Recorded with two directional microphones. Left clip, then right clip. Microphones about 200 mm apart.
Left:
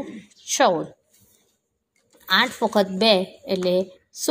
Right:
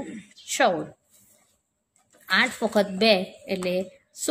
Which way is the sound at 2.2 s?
15° left (ahead or behind).